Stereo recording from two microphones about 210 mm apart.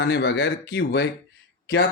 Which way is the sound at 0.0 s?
55° left (ahead or behind).